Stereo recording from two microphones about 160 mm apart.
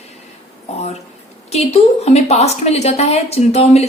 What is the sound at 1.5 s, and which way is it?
A woman's voice, 40° left (ahead or behind).